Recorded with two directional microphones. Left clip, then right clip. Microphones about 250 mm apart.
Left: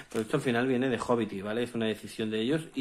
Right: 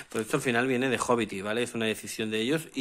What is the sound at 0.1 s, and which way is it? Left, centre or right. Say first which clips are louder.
Speech: right 2 dB; right.